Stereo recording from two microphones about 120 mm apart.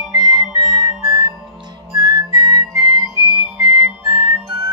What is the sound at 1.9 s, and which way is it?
Whistling, 35° right (ahead or behind).